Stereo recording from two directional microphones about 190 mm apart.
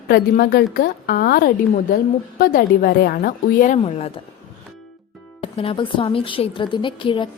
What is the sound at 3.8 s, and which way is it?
Speech, 35° left (ahead or behind).